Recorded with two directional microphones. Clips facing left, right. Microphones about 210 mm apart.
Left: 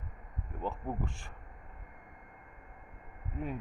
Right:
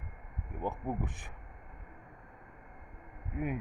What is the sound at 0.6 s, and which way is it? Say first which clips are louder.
Speech: right 1 dB; 15° right (ahead or behind).